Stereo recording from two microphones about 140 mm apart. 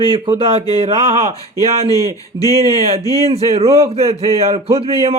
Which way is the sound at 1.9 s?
25° left (ahead or behind).